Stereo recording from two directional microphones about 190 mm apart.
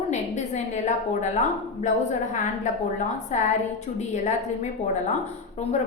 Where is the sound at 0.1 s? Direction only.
40° left (ahead or behind).